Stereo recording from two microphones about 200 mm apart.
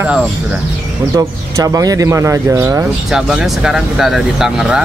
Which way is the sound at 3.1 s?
Centre (ahead or behind).